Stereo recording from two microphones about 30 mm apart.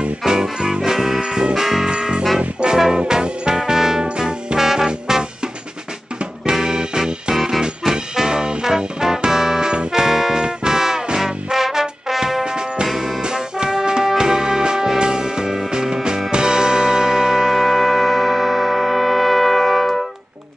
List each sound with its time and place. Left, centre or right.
0.2 s music: right
0.9 s music: centre
1.2 s music: right
1.5 s music: centre
1.9 s music: right
4.6 s music: centre
6.5 s music: right
9.7 s music: right
10.0 s music: centre
10.3 s music: right
10.8 s music: centre
12.4 s music: right
12.8 s music: centre
13.2 s music: right; by 19.9 s centre